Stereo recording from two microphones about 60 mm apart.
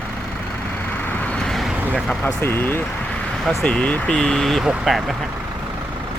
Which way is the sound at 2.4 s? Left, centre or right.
Left.